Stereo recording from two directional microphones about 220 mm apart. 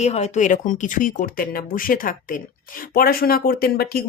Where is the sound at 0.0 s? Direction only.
30° left (ahead or behind).